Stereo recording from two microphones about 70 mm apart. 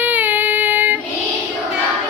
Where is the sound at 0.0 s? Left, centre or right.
Right.